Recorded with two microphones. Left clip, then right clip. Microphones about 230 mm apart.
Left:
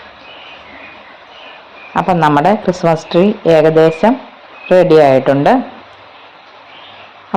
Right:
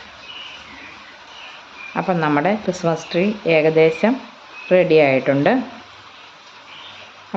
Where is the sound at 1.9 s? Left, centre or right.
Centre.